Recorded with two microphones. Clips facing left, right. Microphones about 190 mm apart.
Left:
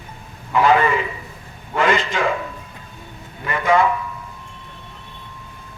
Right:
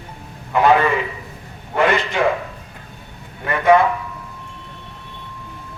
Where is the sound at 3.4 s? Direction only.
60° right (ahead or behind).